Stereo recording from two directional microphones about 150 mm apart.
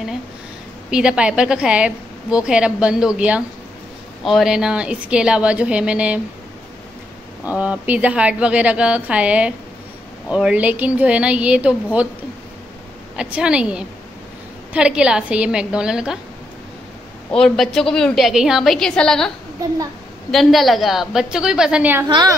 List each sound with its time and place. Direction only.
0.8 s a woman's voice: 5° right (ahead or behind)
7.4 s a woman's voice: 10° right (ahead or behind)
13.1 s a woman's voice: 5° right (ahead or behind)
17.3 s a woman's voice: 5° left (ahead or behind)
22.0 s a woman's voice: 25° right (ahead or behind)